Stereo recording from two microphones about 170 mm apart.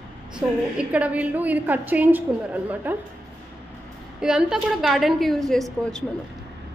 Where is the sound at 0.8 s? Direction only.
10° right (ahead or behind).